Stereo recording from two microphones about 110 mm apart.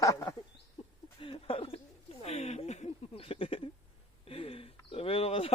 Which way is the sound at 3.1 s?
60° left (ahead or behind).